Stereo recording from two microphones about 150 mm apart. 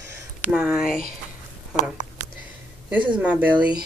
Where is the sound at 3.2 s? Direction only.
10° right (ahead or behind).